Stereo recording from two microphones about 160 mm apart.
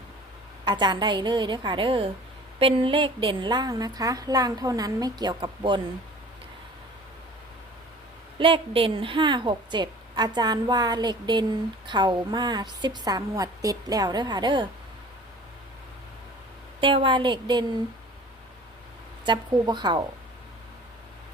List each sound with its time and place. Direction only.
0.6 s a woman's voice: 25° right (ahead or behind)
8.4 s a woman's voice: 35° right (ahead or behind)
16.8 s a woman's voice: 30° right (ahead or behind)
19.2 s a woman's voice: 30° right (ahead or behind)